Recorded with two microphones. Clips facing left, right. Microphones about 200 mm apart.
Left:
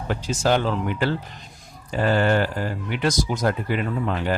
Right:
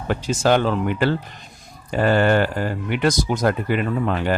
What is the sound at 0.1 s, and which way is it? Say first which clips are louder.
Speech: right 3 dB; 60° right (ahead or behind).